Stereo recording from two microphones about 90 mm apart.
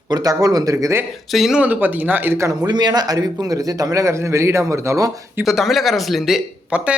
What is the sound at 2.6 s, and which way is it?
A man's voice, 50° right (ahead or behind).